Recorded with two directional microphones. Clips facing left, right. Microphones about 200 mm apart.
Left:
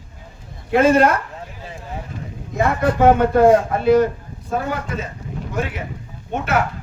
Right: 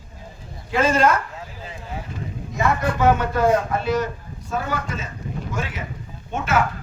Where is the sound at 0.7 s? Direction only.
60° left (ahead or behind).